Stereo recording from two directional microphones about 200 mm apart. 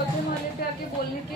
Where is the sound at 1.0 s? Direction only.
50° left (ahead or behind).